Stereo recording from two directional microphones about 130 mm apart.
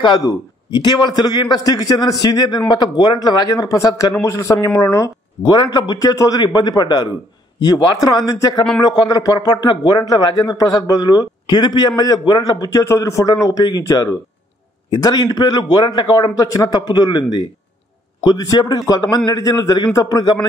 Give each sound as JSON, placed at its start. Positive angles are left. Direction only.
{"t": 0.0, "sound": "a man's voice", "side_deg": 30}